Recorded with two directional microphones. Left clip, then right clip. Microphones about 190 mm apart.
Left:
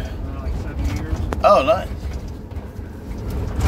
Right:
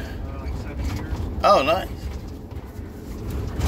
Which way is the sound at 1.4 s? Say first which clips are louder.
Left 3 dB; 25° right (ahead or behind).